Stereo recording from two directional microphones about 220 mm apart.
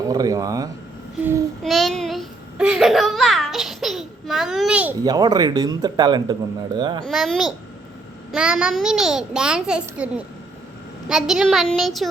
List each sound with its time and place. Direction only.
0.1 s speech: 15° right (ahead or behind)
1.6 s babbling: centre (ahead or behind)
5.0 s speech: 20° right (ahead or behind)
7.0 s a child's voice: centre (ahead or behind)